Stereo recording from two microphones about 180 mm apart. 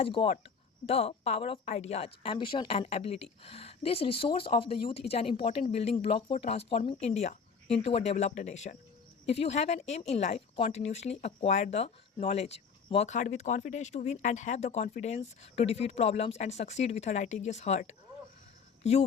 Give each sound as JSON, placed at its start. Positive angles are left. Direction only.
{"t": 0.0, "sound": "speech", "side_deg": 30}